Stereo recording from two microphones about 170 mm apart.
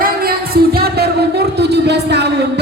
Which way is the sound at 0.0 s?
60° right (ahead or behind).